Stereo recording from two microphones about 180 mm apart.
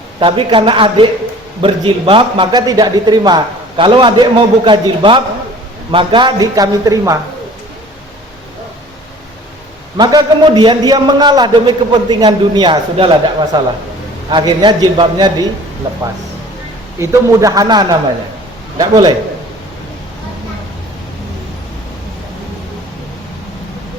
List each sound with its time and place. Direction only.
0.2 s a man's voice: 30° right (ahead or behind)
10.0 s a man's voice: 20° right (ahead or behind)
17.0 s a man's voice: 15° right (ahead or behind)